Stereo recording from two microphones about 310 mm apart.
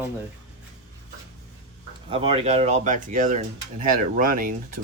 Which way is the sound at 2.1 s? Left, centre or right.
Centre.